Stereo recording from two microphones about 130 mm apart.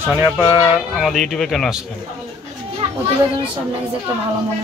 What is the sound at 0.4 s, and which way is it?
Speech, 35° left (ahead or behind).